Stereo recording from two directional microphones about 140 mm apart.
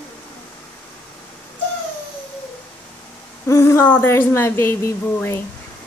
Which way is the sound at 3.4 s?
20° left (ahead or behind).